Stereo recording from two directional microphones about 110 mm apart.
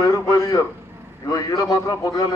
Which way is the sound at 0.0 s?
30° left (ahead or behind).